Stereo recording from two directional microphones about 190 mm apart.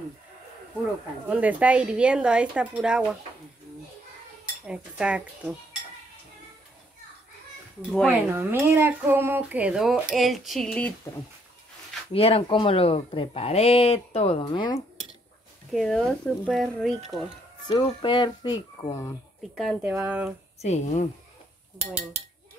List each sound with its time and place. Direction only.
1.2 s speech: 5° right (ahead or behind)
4.6 s speech: 5° right (ahead or behind)
8.3 s speech: 10° right (ahead or behind)
12.1 s speech: 30° left (ahead or behind)
15.7 s speech: centre (ahead or behind)
17.6 s speech: 25° left (ahead or behind)
19.5 s speech: centre (ahead or behind)
20.6 s speech: 35° left (ahead or behind)